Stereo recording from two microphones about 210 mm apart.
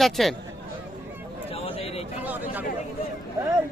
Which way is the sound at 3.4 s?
15° right (ahead or behind).